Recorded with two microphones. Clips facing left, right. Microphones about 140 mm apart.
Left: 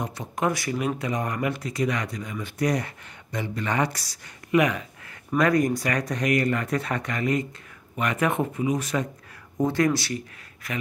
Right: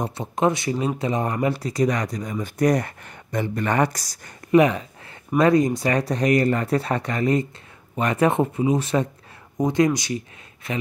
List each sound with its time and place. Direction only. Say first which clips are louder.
0.0 s speech: right 5 dB; 25° right (ahead or behind)